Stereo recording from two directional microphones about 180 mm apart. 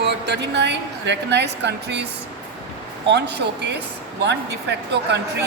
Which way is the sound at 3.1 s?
70° right (ahead or behind).